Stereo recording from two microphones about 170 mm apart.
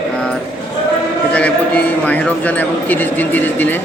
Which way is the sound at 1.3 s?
10° left (ahead or behind).